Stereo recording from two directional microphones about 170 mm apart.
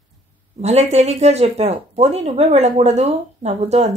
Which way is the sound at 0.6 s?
40° right (ahead or behind).